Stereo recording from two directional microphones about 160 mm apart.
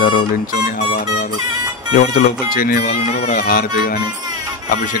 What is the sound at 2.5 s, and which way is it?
Speech, 65° left (ahead or behind).